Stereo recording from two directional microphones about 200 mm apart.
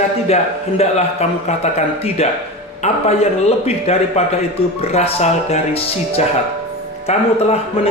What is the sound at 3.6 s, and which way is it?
A man's voice, 30° left (ahead or behind).